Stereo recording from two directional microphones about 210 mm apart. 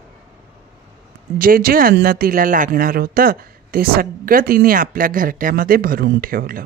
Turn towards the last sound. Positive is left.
turn(degrees=-45)  # may be behind; listen again after turning